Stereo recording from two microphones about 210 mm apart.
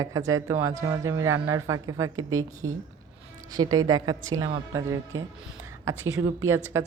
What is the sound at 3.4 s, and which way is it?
A woman's voice, 15° right (ahead or behind).